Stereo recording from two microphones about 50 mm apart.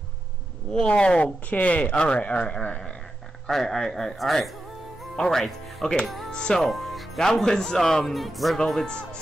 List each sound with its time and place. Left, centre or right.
0.7 s speech: centre
3.4 s a man's voice: centre
6.3 s a man's voice: centre
6.6 s speech: centre
8.5 s a man's voice: centre